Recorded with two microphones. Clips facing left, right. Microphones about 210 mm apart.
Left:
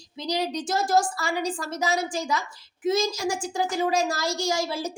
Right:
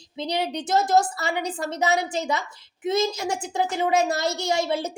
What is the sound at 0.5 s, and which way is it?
A woman's voice, 20° right (ahead or behind).